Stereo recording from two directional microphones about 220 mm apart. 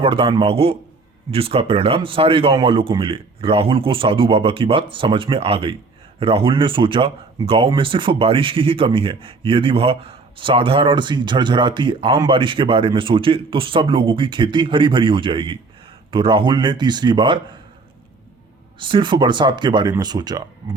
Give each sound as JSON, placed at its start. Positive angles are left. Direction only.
{"t": 0.0, "sound": "speech", "side_deg": -25}
{"t": 18.8, "sound": "speech", "side_deg": -20}